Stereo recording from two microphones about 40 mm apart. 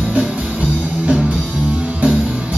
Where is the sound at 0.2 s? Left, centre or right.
Right.